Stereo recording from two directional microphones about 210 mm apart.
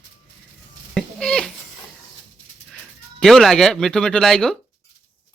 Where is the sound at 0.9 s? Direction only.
5° left (ahead or behind).